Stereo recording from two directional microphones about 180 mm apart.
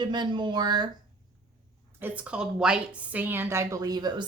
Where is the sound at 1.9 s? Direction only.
10° right (ahead or behind).